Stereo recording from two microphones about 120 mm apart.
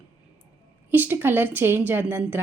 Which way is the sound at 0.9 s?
15° right (ahead or behind).